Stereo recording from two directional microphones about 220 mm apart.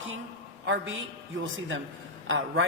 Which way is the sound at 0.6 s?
55° right (ahead or behind).